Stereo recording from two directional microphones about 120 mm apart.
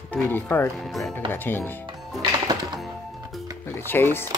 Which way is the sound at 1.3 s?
15° left (ahead or behind).